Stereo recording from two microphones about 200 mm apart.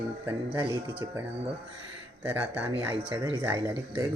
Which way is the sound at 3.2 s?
15° right (ahead or behind).